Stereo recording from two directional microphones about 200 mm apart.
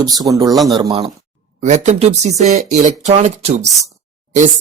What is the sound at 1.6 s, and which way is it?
Speech, 35° right (ahead or behind).